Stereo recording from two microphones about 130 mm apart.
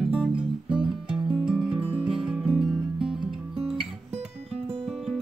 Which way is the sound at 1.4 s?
5° right (ahead or behind).